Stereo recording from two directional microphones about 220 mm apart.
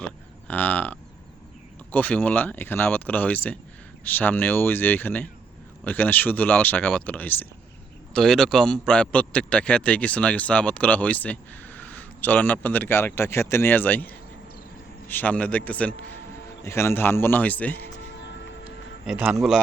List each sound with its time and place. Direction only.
0.0 s a man's voice: 5° left (ahead or behind)
17.7 s music: 55° left (ahead or behind)
18.6 s a sound: 5° right (ahead or behind)